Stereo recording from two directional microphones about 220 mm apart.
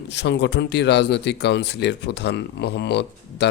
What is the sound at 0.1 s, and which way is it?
Speech, 50° left (ahead or behind).